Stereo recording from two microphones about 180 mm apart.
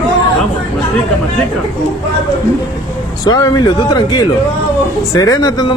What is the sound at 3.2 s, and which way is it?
A man's voice, 20° left (ahead or behind).